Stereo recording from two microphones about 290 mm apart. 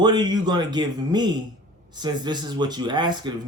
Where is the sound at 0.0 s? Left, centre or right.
Centre.